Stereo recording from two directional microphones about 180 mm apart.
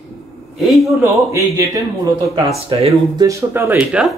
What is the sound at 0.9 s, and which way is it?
Speech, 15° right (ahead or behind).